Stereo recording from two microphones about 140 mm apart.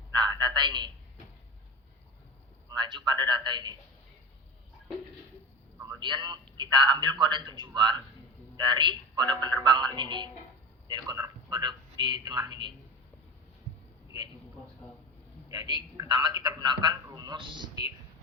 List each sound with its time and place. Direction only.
0.1 s a sound: 30° right (ahead or behind)
2.6 s a man's voice: 35° right (ahead or behind)
5.8 s a man's voice: 35° right (ahead or behind)
15.4 s a man's voice: 30° right (ahead or behind)